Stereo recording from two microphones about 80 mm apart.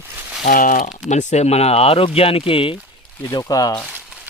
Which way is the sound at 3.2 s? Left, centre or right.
Left.